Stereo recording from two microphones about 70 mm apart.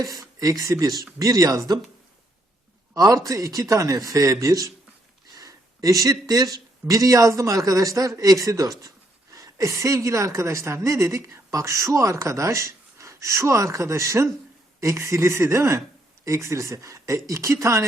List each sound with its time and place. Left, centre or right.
0.0 s speech: right
2.9 s a man's voice: right